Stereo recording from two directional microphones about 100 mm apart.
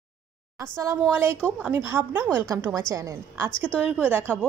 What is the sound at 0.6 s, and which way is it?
A woman's voice, 30° right (ahead or behind).